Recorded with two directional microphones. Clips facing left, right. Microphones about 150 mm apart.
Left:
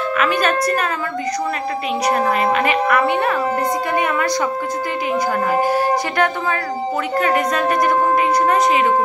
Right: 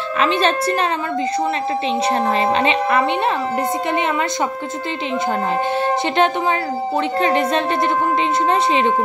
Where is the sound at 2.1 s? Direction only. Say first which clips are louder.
Left 2 dB; 30° right (ahead or behind).